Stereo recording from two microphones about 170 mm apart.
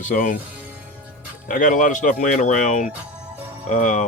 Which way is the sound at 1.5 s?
50° left (ahead or behind).